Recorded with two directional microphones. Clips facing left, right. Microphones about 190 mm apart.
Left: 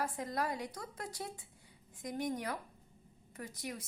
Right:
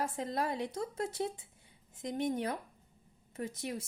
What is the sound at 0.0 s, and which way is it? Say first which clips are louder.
A woman's voice: right 2 dB; 25° right (ahead or behind).